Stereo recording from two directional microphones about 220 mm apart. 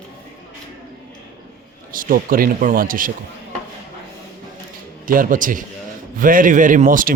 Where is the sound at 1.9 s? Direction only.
40° right (ahead or behind).